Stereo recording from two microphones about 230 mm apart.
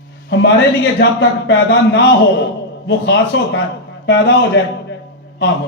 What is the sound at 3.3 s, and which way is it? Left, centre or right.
A man's voice, left.